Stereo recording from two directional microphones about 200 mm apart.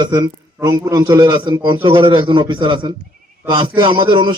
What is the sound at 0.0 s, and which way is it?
A man's voice, 20° right (ahead or behind).